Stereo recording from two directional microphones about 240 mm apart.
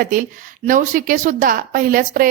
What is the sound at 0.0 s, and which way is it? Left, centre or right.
A woman's voice, right.